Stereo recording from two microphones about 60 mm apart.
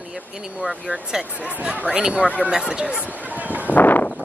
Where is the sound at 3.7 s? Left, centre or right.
Left.